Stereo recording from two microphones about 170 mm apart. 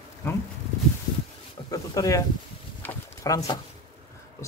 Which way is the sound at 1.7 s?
20° left (ahead or behind).